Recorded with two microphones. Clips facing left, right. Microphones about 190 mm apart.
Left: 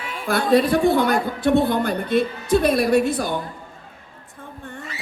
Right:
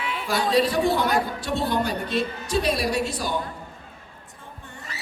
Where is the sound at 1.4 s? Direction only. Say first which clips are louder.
Left 7 dB; 55° left (ahead or behind).